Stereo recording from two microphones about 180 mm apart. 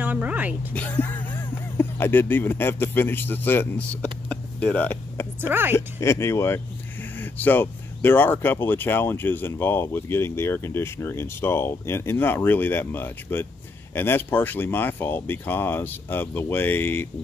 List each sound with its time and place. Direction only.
0.0 s a woman's voice: 10° right (ahead or behind)
0.7 s speech: 10° left (ahead or behind)
5.5 s a woman's voice: 10° right (ahead or behind)
5.8 s speech: 15° left (ahead or behind)